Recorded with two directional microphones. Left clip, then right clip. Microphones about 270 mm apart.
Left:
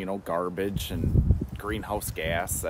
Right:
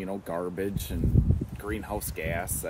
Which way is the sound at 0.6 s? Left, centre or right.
Centre.